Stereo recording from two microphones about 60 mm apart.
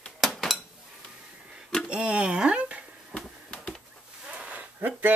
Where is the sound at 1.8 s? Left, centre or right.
Centre.